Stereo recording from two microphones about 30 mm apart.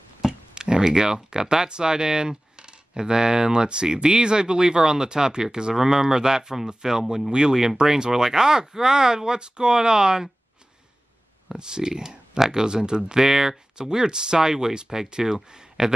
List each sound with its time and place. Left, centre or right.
0.2 s a sound: right
1.7 s speech: right
11.5 s speech: right